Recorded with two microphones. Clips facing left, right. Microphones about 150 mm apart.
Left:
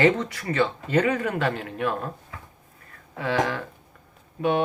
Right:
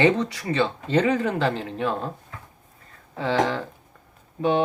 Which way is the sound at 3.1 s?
30° right (ahead or behind).